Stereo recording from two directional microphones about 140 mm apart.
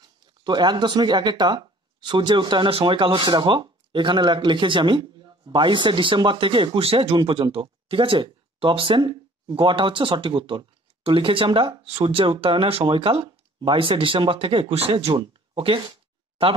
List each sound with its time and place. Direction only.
0.0 s speech: 30° right (ahead or behind)